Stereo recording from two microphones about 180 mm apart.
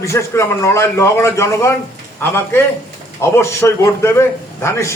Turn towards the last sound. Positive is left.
turn(degrees=15)  # may be behind; listen again after turning